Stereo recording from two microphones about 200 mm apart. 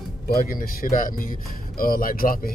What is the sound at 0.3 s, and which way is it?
Speech, 45° left (ahead or behind).